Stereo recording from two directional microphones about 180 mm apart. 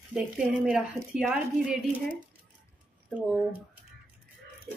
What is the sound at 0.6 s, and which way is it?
A woman's voice, 5° right (ahead or behind).